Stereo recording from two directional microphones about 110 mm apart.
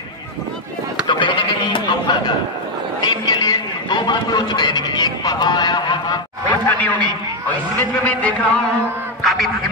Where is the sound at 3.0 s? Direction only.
40° left (ahead or behind).